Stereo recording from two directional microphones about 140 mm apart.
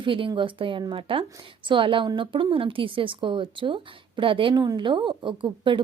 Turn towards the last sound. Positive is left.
turn(degrees=-35)  # may be behind; listen again after turning